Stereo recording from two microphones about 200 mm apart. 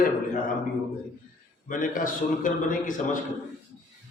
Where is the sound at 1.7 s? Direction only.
40° left (ahead or behind).